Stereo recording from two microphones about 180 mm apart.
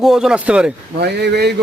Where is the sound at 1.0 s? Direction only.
65° right (ahead or behind).